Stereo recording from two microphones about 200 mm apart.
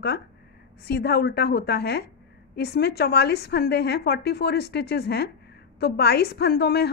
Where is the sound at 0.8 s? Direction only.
55° left (ahead or behind).